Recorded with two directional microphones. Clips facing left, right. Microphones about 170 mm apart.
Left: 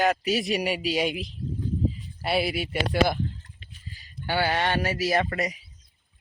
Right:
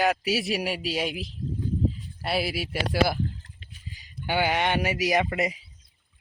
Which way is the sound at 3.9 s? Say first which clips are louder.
Right 1 dB; 15° right (ahead or behind).